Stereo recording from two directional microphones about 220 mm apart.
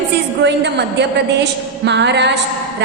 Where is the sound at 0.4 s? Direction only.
50° right (ahead or behind).